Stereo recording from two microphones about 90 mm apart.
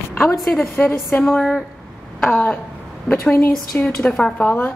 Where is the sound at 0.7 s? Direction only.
20° left (ahead or behind).